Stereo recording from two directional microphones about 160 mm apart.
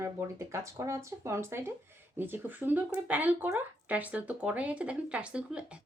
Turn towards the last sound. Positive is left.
turn(degrees=-5)  # may be behind; listen again after turning